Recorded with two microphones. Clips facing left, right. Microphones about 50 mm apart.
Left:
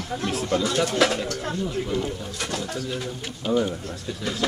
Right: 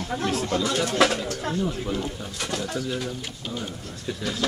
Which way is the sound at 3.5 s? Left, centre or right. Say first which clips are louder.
Left 13 dB; left.